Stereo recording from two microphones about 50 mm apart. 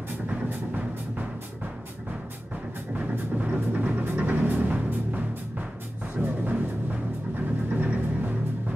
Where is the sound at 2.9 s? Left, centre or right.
Right.